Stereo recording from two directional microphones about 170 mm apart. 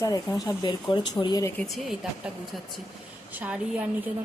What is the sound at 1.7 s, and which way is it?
Speech, centre (ahead or behind).